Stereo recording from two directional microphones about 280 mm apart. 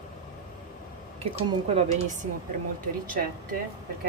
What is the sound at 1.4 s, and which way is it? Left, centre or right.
Speech, right.